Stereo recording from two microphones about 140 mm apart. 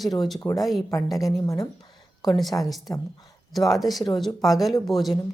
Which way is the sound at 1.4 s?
25° left (ahead or behind).